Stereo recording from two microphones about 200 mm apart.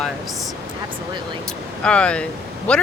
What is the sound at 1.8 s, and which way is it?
Speech, 5° left (ahead or behind).